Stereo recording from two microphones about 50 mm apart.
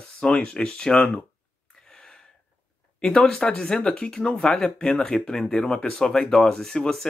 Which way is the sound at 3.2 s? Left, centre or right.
Centre.